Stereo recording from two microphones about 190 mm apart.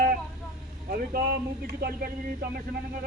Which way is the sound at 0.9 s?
55° right (ahead or behind).